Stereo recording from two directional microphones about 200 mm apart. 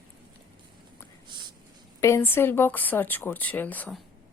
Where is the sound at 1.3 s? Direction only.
20° right (ahead or behind).